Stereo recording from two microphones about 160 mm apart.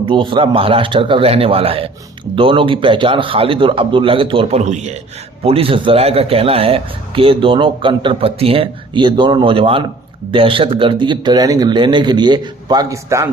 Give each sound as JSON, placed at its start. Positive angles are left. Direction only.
{"t": 0.0, "sound": "a man's voice", "side_deg": -30}